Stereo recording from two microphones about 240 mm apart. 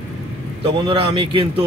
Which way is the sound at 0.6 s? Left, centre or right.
Right.